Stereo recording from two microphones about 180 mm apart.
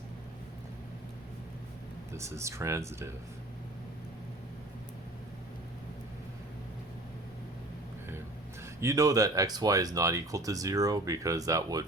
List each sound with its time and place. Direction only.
2.1 s speech: 15° right (ahead or behind)
8.8 s speech: 15° right (ahead or behind)